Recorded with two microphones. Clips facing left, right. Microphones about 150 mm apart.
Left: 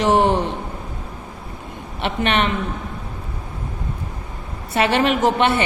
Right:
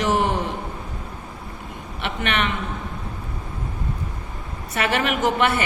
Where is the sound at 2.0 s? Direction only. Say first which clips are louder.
Left 5 dB; 30° left (ahead or behind).